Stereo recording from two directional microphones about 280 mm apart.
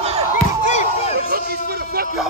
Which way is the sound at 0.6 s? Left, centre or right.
Left.